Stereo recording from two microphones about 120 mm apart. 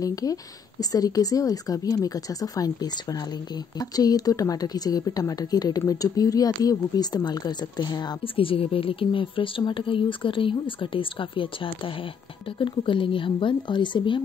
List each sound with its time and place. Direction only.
0.0 s a woman's voice: 30° left (ahead or behind)
8.2 s speech: 50° left (ahead or behind)